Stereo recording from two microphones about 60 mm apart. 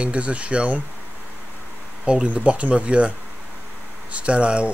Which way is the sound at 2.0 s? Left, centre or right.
Centre.